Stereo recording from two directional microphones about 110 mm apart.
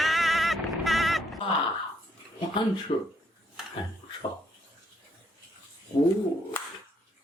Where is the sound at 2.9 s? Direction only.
75° left (ahead or behind).